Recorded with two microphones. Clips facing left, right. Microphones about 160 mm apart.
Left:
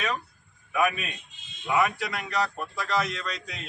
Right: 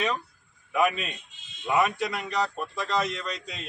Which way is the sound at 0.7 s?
20° right (ahead or behind).